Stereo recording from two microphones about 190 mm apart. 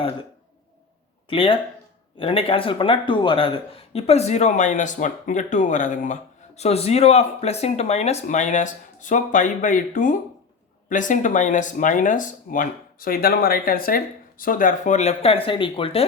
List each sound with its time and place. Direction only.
1.3 s speech: 30° left (ahead or behind)